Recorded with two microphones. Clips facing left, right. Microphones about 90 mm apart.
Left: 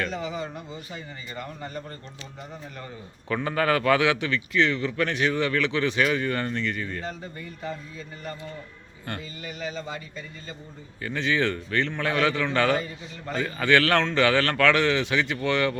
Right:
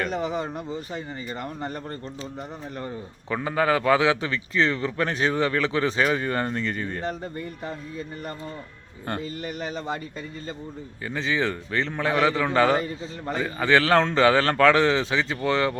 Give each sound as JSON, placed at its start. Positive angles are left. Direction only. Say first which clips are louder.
{"t": 0.1, "sound": "a man's voice", "louder": "right 4 dB", "side_deg": -55}
{"t": 3.2, "sound": "a man's voice", "louder": "right 1 dB", "side_deg": -15}
{"t": 6.7, "sound": "speech", "louder": "right 1 dB", "side_deg": -35}
{"t": 7.0, "sound": "speech", "louder": "right 5 dB", "side_deg": -50}
{"t": 9.4, "sound": "speech", "louder": "right 3 dB", "side_deg": -50}
{"t": 11.0, "sound": "a man's voice", "louder": "left 1 dB", "side_deg": -20}